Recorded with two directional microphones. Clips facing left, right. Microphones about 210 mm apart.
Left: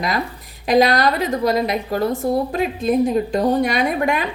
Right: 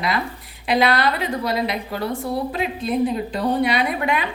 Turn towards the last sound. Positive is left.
turn(degrees=45)  # may be behind; listen again after turning